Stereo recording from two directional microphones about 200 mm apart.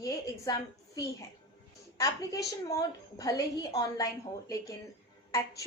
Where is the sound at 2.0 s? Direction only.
15° left (ahead or behind).